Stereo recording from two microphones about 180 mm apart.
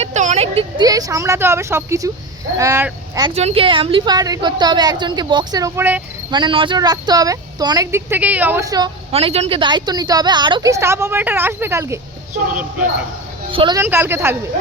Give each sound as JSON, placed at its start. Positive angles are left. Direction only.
{"t": 0.0, "sound": "vehicle", "side_deg": -40}
{"t": 0.8, "sound": "a woman's voice", "side_deg": -20}
{"t": 3.2, "sound": "a woman's voice", "side_deg": -35}
{"t": 6.3, "sound": "a woman's voice", "side_deg": -25}
{"t": 9.1, "sound": "a woman's voice", "side_deg": -35}
{"t": 13.5, "sound": "speech", "side_deg": -30}
{"t": 13.7, "sound": "a woman's voice", "side_deg": -10}